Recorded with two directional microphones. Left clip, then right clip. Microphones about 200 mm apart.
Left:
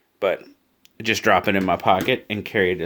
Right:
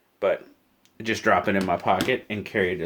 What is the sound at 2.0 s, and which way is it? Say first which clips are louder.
Speech: left 3 dB; 50° left (ahead or behind).